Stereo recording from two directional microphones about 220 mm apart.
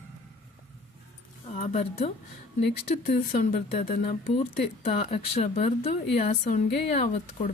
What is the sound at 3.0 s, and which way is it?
Speech, 40° left (ahead or behind).